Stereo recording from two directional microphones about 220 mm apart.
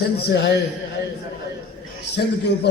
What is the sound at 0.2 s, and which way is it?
Speech, 50° left (ahead or behind).